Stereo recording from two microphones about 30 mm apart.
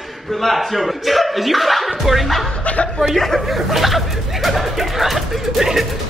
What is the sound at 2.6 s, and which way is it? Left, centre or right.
Chuckle, left.